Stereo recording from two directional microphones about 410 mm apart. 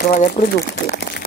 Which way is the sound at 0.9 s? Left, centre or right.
Left.